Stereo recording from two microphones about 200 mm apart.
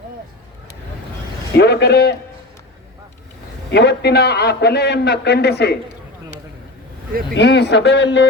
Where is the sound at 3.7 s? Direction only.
55° left (ahead or behind).